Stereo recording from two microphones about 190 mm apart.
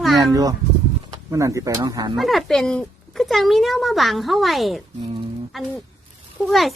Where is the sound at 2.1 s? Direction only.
Centre (ahead or behind).